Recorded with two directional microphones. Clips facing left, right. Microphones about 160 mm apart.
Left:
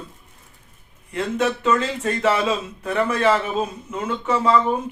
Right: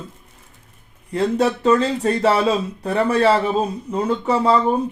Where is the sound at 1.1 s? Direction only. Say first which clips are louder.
Right 4 dB; 35° right (ahead or behind).